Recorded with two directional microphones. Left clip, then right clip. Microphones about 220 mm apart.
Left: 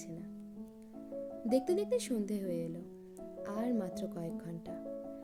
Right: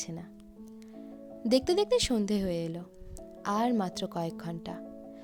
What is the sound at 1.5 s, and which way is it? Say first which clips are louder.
Speech: right 6 dB; 45° right (ahead or behind).